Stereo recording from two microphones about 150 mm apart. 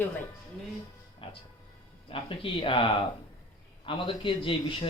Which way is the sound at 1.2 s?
35° left (ahead or behind).